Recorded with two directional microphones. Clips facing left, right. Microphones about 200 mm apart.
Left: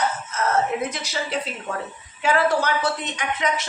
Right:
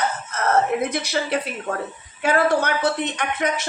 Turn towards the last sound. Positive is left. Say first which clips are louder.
# right 2 dB
turn(degrees=-55)  # may be behind; listen again after turning